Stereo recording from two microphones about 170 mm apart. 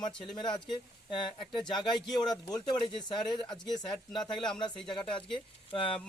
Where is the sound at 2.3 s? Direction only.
25° left (ahead or behind).